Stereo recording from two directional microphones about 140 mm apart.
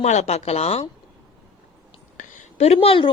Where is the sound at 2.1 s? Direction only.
55° left (ahead or behind); by 3.1 s 40° left (ahead or behind).